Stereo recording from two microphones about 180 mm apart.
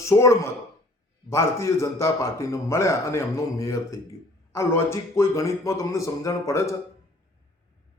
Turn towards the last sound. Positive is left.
turn(degrees=15)  # may be behind; listen again after turning